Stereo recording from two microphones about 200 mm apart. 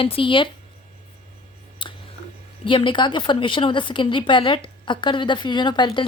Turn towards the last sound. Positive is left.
turn(degrees=25)  # may be behind; listen again after turning